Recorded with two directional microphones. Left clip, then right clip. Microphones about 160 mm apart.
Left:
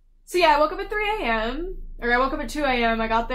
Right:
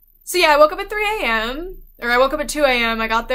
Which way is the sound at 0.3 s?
15° right (ahead or behind).